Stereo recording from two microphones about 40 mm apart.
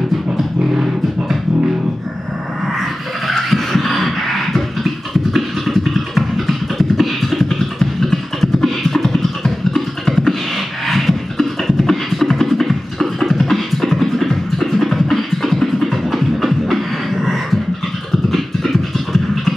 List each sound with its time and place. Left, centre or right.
3.3 s a sound: centre
5.3 s beatboxing: centre
18.3 s music: centre